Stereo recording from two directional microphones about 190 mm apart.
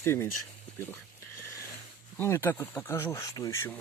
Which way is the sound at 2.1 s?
10° left (ahead or behind).